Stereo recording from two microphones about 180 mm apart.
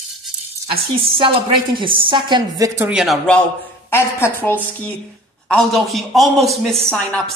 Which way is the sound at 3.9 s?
15° left (ahead or behind).